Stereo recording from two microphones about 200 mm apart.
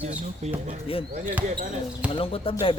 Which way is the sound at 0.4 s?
35° right (ahead or behind).